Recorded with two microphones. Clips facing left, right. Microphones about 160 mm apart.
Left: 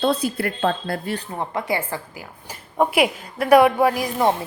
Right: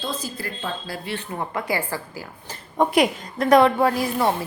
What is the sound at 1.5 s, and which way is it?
Speech, 25° left (ahead or behind).